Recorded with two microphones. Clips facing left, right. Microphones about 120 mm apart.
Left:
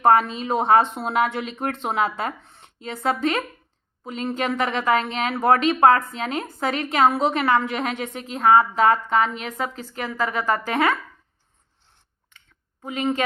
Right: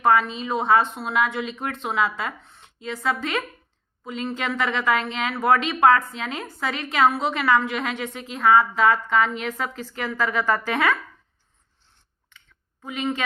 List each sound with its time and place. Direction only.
0.1 s a woman's voice: 45° left (ahead or behind)
12.8 s a woman's voice: 35° left (ahead or behind)